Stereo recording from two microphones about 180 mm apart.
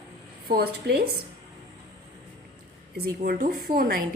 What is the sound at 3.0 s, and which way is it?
Speech, 50° right (ahead or behind).